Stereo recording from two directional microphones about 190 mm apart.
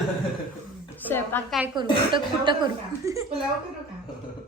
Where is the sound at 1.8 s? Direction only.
25° right (ahead or behind).